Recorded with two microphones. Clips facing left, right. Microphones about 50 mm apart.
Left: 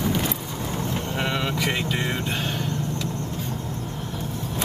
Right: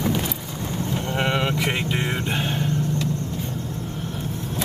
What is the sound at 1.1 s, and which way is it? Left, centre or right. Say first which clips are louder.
Vehicle: right 4 dB; right.